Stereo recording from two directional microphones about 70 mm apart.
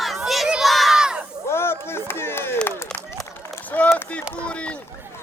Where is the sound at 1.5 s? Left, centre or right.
Left.